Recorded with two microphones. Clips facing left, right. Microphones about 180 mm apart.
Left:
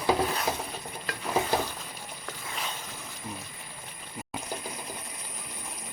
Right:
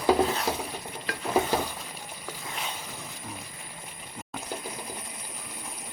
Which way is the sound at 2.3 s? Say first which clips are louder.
Right 1 dB; 5° right (ahead or behind).